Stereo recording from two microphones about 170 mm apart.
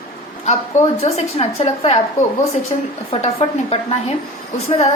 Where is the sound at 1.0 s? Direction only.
35° left (ahead or behind).